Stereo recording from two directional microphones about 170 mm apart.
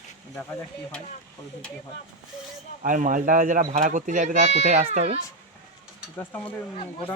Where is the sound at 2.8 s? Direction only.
50° right (ahead or behind).